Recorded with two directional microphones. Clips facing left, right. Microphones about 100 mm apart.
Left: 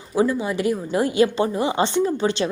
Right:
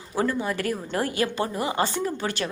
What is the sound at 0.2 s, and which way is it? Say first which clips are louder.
A woman's voice: left 5 dB; 15° left (ahead or behind).